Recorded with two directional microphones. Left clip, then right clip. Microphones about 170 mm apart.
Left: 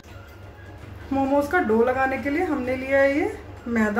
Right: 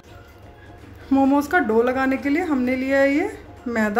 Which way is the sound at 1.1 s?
65° right (ahead or behind).